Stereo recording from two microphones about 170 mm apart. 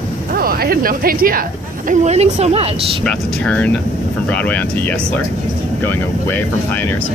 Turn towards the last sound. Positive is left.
turn(degrees=10)  # may be behind; listen again after turning